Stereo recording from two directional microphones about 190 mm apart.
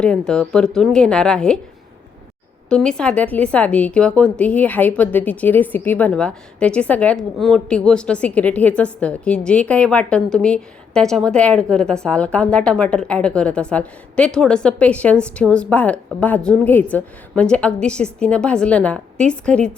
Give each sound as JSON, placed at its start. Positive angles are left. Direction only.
{"t": 0.0, "sound": "a woman's voice", "side_deg": 5}
{"t": 2.6, "sound": "a woman's voice", "side_deg": 5}